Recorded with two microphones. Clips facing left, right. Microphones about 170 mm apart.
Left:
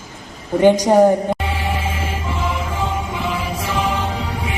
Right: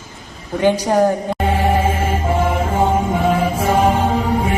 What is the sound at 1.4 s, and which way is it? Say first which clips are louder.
Music: right 7 dB; 50° right (ahead or behind).